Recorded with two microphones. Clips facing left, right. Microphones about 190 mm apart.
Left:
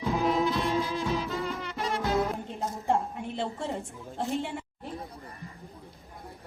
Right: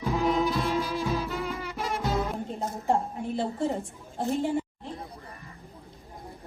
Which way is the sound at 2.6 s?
35° right (ahead or behind).